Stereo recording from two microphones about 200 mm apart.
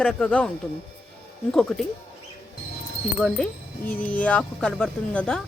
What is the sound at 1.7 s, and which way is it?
Speech, centre (ahead or behind).